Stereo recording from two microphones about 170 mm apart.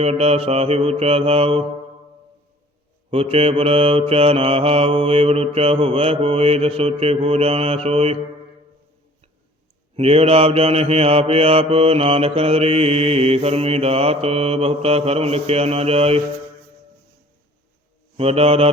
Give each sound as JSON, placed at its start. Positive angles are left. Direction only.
{"t": 0.0, "sound": "mantra", "side_deg": -35}
{"t": 3.1, "sound": "mantra", "side_deg": -35}
{"t": 9.9, "sound": "mantra", "side_deg": -35}
{"t": 18.2, "sound": "mantra", "side_deg": -35}